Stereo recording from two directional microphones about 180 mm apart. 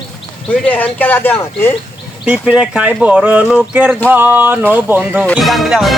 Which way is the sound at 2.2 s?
5° right (ahead or behind).